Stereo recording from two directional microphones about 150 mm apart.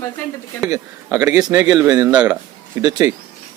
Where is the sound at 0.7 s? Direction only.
20° right (ahead or behind).